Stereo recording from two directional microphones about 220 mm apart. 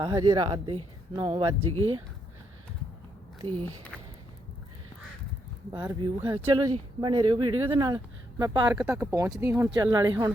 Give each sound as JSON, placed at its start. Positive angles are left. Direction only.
{"t": 0.0, "sound": "speech", "side_deg": -20}
{"t": 3.9, "sound": "a sound", "side_deg": 5}
{"t": 5.7, "sound": "speech", "side_deg": -20}